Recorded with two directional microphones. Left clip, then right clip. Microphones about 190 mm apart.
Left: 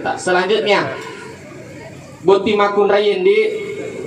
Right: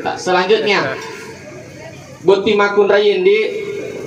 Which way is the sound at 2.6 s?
35° left (ahead or behind).